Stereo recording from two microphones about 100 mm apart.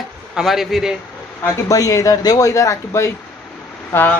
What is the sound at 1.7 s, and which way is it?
Speech, 35° left (ahead or behind).